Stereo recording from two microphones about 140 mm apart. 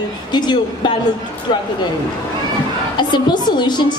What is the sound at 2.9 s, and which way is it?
A woman's voice, 30° left (ahead or behind).